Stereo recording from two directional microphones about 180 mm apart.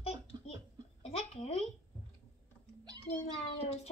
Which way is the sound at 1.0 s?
35° left (ahead or behind).